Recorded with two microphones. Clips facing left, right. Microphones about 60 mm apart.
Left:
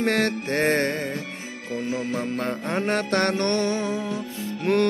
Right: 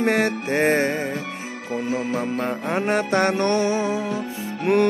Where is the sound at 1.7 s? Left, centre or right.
Right.